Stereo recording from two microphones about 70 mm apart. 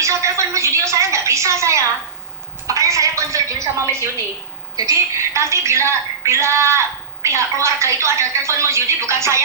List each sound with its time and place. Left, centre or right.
0.0 s a woman's voice: right
2.6 s a sound: right
4.9 s a woman's voice: right